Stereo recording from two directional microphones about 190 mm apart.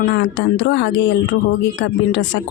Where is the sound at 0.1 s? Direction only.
70° left (ahead or behind).